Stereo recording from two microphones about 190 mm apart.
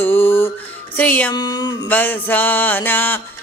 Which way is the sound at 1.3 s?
20° left (ahead or behind).